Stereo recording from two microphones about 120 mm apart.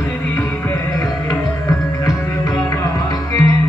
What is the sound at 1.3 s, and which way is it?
Music, 30° left (ahead or behind).